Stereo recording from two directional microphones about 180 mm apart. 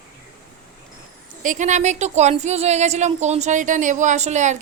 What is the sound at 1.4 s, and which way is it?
Speech, 45° right (ahead or behind).